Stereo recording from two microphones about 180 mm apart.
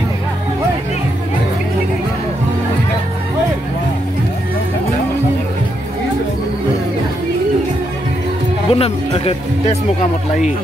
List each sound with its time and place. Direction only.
8.7 s speech: 30° left (ahead or behind)